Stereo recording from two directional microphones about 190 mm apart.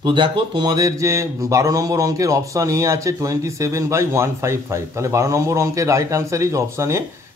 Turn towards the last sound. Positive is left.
turn(degrees=-15)  # may be behind; listen again after turning